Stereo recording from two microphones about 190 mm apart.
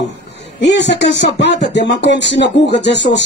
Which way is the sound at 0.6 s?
70° left (ahead or behind).